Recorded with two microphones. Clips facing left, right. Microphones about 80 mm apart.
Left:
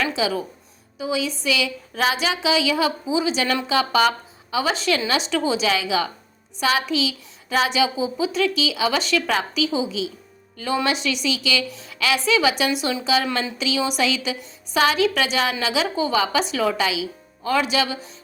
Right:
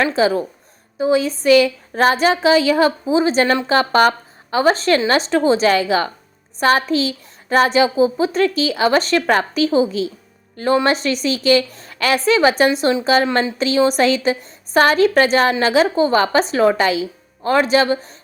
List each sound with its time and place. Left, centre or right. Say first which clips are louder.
0.0 s a woman's voice: right 7 dB; right